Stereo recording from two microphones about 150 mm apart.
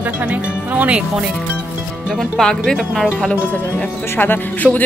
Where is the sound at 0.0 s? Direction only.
10° right (ahead or behind).